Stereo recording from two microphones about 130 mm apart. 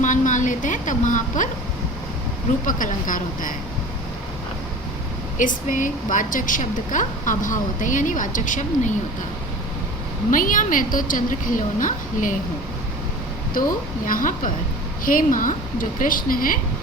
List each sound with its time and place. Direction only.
0.0 s a woman's voice: 75° left (ahead or behind)
2.6 s a woman's voice: 90° left
5.4 s a woman's voice: 90° left
10.3 s a woman's voice: 90° left
13.5 s a woman's voice: 90° left